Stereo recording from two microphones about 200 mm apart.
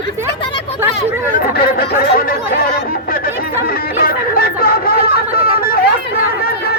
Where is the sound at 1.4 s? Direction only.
50° left (ahead or behind).